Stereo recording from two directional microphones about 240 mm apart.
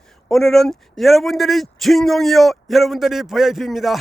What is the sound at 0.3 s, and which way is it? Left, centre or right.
Speech, centre.